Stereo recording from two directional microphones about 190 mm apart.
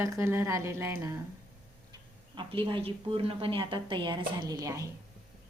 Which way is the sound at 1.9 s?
25° right (ahead or behind).